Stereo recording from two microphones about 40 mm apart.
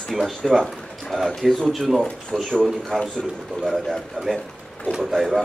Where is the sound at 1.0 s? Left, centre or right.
Centre.